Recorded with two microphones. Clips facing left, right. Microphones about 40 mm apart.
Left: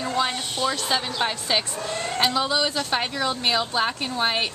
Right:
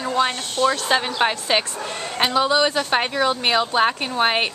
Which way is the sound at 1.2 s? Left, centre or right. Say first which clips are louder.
Right 4 dB; right.